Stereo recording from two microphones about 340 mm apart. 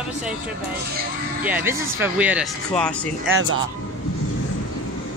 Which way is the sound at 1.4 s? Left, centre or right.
Centre.